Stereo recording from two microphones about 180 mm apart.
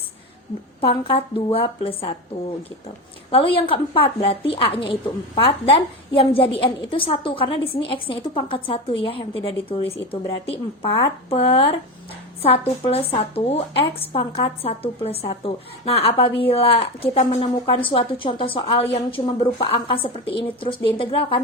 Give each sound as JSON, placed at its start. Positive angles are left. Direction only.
{"t": 0.8, "sound": "a woman's voice", "side_deg": 30}
{"t": 3.3, "sound": "a woman's voice", "side_deg": 30}
{"t": 12.8, "sound": "a woman's voice", "side_deg": 35}